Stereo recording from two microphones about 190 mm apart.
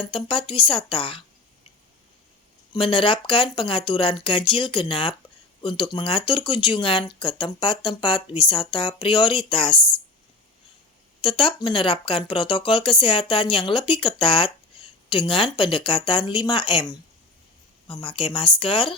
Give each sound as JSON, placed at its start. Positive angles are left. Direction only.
{"t": 0.1, "sound": "speech", "side_deg": 25}
{"t": 2.7, "sound": "speech", "side_deg": 25}
{"t": 11.2, "sound": "speech", "side_deg": 25}
{"t": 17.8, "sound": "speech", "side_deg": 30}